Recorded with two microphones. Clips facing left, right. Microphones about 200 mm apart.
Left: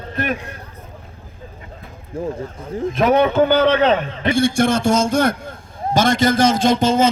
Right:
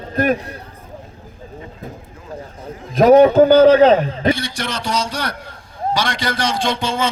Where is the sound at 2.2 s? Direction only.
30° left (ahead or behind).